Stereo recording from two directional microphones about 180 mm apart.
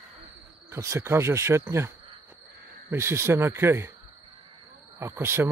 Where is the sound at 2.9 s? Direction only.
15° right (ahead or behind).